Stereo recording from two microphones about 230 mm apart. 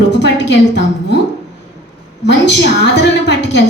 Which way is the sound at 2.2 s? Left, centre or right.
Left.